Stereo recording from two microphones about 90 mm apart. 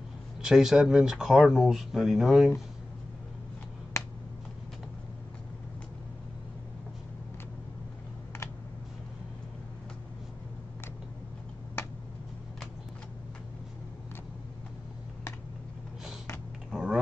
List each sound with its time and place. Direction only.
0.4 s speech: 5° right (ahead or behind)
3.9 s finger snapping: 35° left (ahead or behind)
16.7 s a sound: 5° right (ahead or behind)